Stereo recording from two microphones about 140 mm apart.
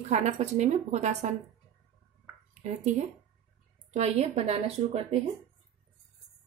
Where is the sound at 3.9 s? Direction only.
50° right (ahead or behind).